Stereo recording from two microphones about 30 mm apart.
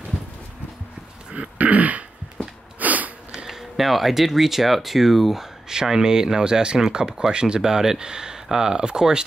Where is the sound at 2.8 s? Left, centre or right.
Right.